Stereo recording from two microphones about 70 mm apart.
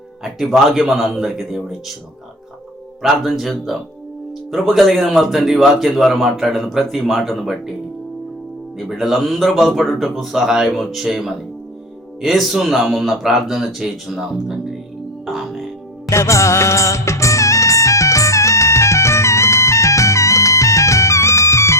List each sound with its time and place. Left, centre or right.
0.2 s speech: centre
3.0 s speech: centre
8.8 s speech: centre
16.0 s music: left